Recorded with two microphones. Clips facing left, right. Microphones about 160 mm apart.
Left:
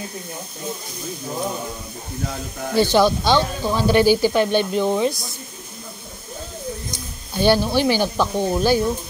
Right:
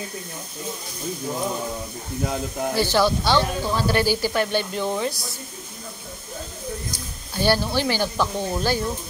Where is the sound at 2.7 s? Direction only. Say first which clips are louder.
Left 5 dB; 15° left (ahead or behind).